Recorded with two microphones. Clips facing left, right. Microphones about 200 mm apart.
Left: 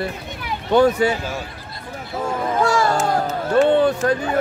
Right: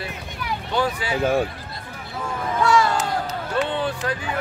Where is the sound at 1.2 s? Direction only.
55° right (ahead or behind).